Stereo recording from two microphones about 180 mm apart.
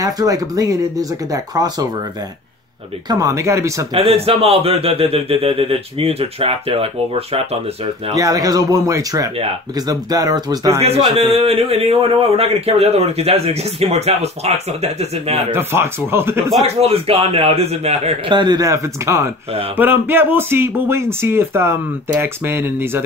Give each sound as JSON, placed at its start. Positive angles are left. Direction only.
{"t": 0.0, "sound": "speech", "side_deg": -20}
{"t": 3.1, "sound": "speech", "side_deg": -20}
{"t": 3.9, "sound": "a man's voice", "side_deg": -30}
{"t": 8.1, "sound": "speech", "side_deg": -20}
{"t": 10.8, "sound": "a man's voice", "side_deg": -35}
{"t": 15.5, "sound": "speech", "side_deg": -15}
{"t": 16.6, "sound": "a man's voice", "side_deg": -35}
{"t": 18.3, "sound": "speech", "side_deg": -25}